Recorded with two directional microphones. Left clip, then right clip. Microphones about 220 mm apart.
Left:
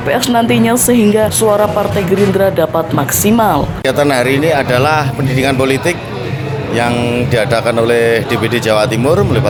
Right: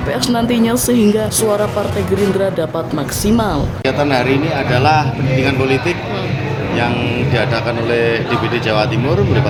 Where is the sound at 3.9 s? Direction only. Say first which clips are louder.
Left 3 dB; 55° left (ahead or behind).